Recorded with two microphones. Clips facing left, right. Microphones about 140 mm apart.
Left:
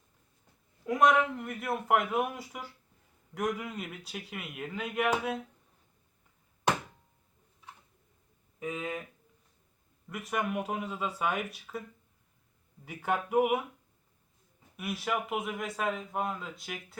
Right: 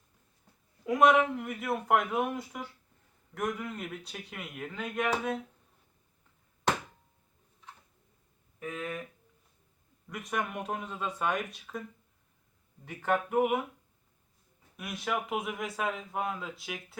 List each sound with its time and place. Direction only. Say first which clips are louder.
0.9 s speech: right 2 dB; centre (ahead or behind)
8.5 s speech: left 2 dB; 15° left (ahead or behind)
10.1 s speech: left 2 dB; 5° left (ahead or behind)
12.8 s speech: right 2 dB; 10° left (ahead or behind)
14.8 s speech: left 1 dB; 5° left (ahead or behind)